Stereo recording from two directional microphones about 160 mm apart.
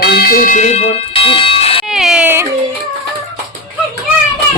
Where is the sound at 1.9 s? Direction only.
5° right (ahead or behind).